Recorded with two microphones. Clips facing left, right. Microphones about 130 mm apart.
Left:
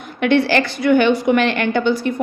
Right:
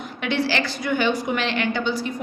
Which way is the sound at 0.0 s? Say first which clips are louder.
Left 8 dB; 55° left (ahead or behind).